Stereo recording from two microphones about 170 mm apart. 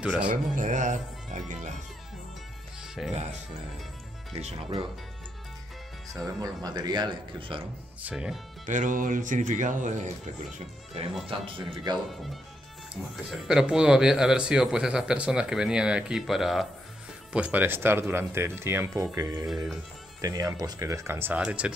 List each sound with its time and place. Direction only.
0.0 s speech: 5° right (ahead or behind)
0.3 s speech: 45° right (ahead or behind)
3.1 s speech: 40° right (ahead or behind)
6.2 s speech: 20° right (ahead or behind)
8.0 s speech: 5° right (ahead or behind)
8.6 s speech: 50° right (ahead or behind); by 12.0 s 25° right (ahead or behind)
12.9 s speech: centre (ahead or behind)